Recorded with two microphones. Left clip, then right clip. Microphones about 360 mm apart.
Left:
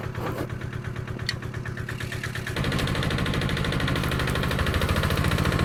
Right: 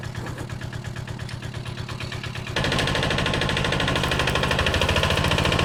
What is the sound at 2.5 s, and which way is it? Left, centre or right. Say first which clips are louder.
Engine: right 7 dB; right.